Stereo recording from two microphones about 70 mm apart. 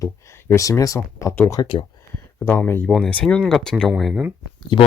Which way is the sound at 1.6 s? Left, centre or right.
Left.